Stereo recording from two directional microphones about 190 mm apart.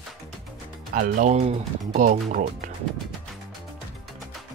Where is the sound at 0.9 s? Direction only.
45° right (ahead or behind).